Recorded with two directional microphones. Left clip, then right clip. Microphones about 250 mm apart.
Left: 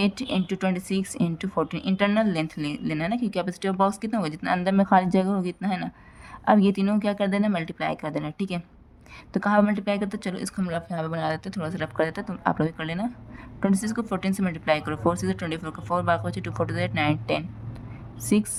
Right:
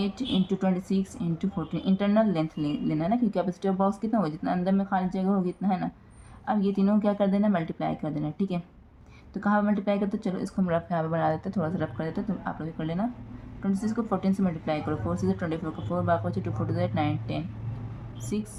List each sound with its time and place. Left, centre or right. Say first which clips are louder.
0.0 s speech: left 3 dB; left